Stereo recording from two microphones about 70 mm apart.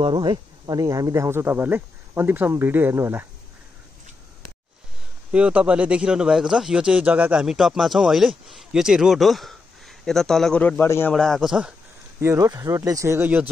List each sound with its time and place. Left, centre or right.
0.2 s speech: right
5.3 s speech: centre
7.5 s speech: centre
10.8 s a man's voice: left
11.1 s speech: centre
12.4 s speech: right